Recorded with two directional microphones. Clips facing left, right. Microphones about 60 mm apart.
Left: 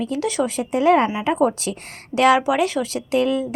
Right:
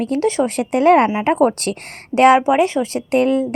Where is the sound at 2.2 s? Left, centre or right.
Right.